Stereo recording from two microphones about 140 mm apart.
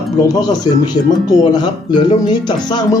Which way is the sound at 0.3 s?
30° left (ahead or behind).